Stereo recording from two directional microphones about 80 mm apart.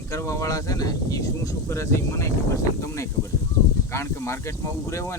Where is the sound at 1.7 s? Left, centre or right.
Left.